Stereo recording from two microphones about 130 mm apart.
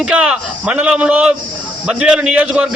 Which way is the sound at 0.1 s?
10° right (ahead or behind).